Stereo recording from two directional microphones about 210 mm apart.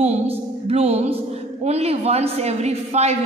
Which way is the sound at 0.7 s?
30° right (ahead or behind).